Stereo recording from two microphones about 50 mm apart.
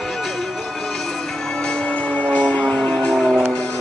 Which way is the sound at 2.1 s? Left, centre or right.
Left.